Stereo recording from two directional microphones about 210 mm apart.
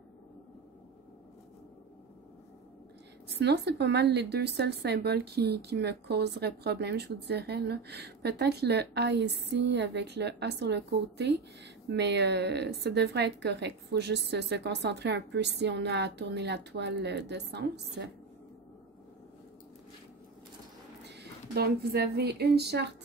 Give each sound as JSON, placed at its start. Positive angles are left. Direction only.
{"t": 3.3, "sound": "speech", "side_deg": -50}
{"t": 21.0, "sound": "speech", "side_deg": -50}